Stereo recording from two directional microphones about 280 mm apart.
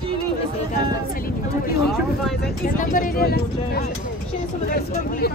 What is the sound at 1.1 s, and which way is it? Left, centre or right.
Speech, left.